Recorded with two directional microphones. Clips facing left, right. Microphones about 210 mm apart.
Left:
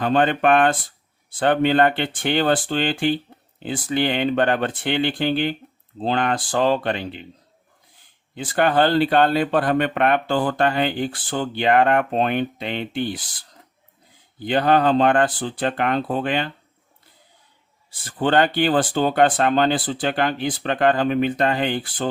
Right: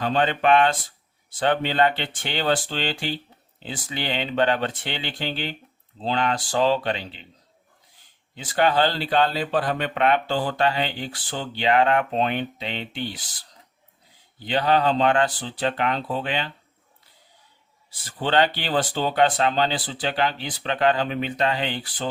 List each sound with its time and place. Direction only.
0.0 s speech: 50° left (ahead or behind)
8.4 s speech: 55° left (ahead or behind)
14.3 s speech: 50° left (ahead or behind)
18.0 s speech: 50° left (ahead or behind)